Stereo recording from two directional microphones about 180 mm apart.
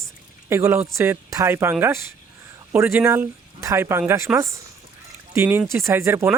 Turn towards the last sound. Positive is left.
turn(degrees=-10)  # may be behind; listen again after turning